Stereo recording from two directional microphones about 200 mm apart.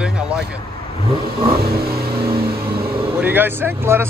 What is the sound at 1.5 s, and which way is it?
Vehicle, 50° right (ahead or behind).